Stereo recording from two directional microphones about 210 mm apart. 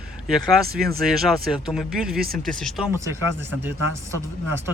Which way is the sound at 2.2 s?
45° right (ahead or behind).